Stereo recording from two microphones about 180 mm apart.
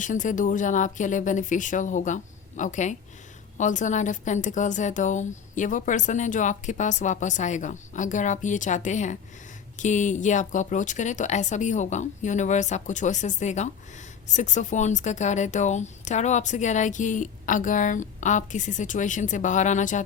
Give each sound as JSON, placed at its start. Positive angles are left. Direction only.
{"t": 0.0, "sound": "a woman's voice", "side_deg": 45}